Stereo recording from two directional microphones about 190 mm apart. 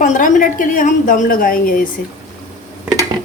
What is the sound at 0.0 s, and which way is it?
A woman's voice, 40° left (ahead or behind).